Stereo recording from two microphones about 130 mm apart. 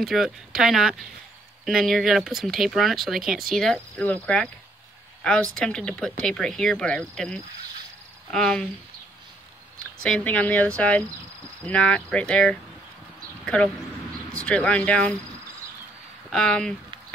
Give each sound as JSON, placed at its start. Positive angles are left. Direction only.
{"t": 0.0, "sound": "speech", "side_deg": 0}
{"t": 10.0, "sound": "speech", "side_deg": 10}
{"t": 16.3, "sound": "speech", "side_deg": 5}